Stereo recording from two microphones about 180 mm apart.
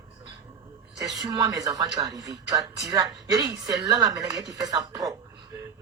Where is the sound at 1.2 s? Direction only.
20° right (ahead or behind).